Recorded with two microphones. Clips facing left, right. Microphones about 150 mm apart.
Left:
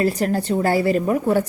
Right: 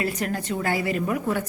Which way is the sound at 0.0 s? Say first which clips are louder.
Left 7 dB; 35° left (ahead or behind).